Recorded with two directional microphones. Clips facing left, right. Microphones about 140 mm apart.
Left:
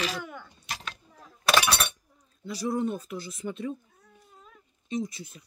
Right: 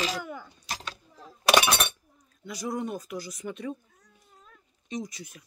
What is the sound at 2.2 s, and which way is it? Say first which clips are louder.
Speech: left 4 dB; 30° left (ahead or behind).